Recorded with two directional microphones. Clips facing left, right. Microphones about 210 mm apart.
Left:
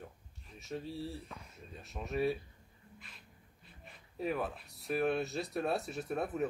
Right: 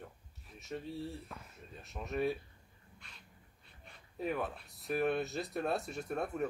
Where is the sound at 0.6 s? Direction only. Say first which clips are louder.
Left 1 dB; centre (ahead or behind).